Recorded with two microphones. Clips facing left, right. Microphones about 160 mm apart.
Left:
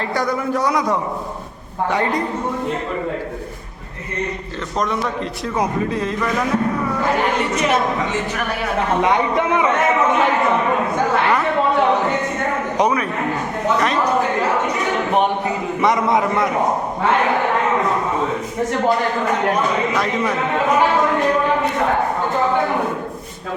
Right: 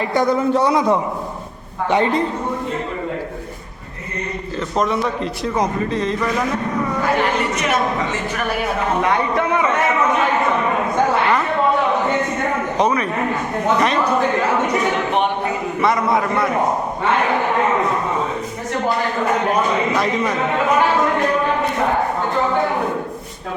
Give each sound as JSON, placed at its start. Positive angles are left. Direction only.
{"t": 0.1, "sound": "a man's voice", "side_deg": -25}
{"t": 4.8, "sound": "a man's voice", "side_deg": 0}
{"t": 9.0, "sound": "speech", "side_deg": 15}
{"t": 12.7, "sound": "a man's voice", "side_deg": 10}
{"t": 15.8, "sound": "a man's voice", "side_deg": 20}